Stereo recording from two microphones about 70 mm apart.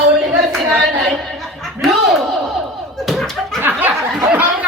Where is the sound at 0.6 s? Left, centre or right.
Right.